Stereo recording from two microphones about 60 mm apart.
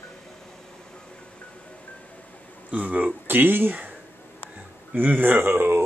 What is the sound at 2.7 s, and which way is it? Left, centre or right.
Speech, right.